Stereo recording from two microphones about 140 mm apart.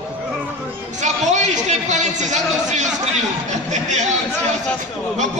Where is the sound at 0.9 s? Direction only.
60° right (ahead or behind).